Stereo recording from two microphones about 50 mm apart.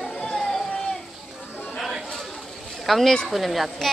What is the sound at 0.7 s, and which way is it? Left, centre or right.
Children playing, centre.